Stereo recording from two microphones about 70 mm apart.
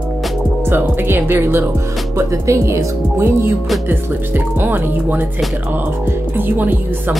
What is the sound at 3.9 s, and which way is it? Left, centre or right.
Speech, right.